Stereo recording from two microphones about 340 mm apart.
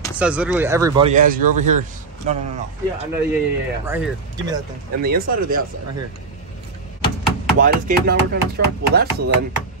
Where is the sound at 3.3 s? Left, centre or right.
Centre.